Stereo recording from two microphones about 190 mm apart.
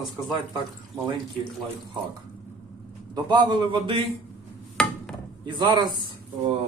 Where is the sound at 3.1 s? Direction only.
20° right (ahead or behind).